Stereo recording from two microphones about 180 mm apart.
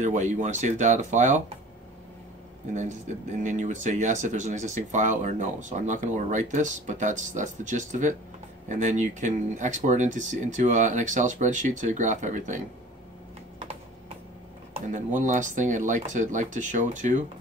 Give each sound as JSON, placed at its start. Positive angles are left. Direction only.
{"t": 0.0, "sound": "speech", "side_deg": -40}
{"t": 2.7, "sound": "speech", "side_deg": -40}
{"t": 13.6, "sound": "computer keyboard", "side_deg": -40}
{"t": 14.9, "sound": "speech", "side_deg": -45}